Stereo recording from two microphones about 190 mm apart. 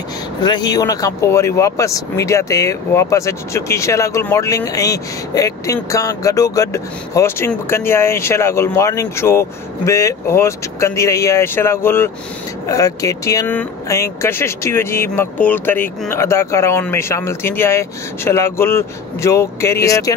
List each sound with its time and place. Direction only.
0.4 s speech: 20° left (ahead or behind)